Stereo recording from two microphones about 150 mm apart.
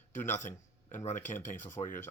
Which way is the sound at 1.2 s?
15° left (ahead or behind).